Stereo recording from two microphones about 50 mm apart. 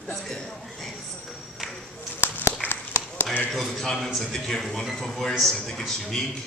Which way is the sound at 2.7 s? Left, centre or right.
Left.